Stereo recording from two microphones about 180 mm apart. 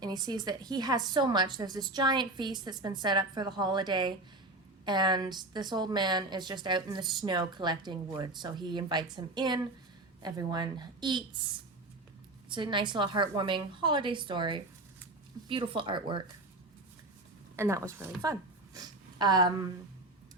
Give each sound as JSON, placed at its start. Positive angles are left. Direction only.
{"t": 0.0, "sound": "a woman's voice", "side_deg": -25}
{"t": 12.5, "sound": "a woman's voice", "side_deg": -25}
{"t": 17.6, "sound": "a woman's voice", "side_deg": -15}